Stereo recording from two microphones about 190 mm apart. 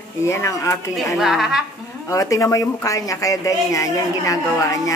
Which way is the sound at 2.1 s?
15° left (ahead or behind).